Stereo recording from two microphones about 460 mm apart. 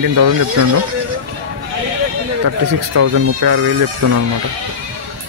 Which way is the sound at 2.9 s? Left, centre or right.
Right.